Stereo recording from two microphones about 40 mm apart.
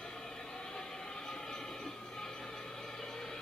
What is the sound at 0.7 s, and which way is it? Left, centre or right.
Train, centre.